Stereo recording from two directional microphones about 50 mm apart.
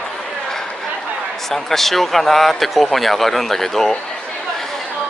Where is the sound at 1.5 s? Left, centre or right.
Centre.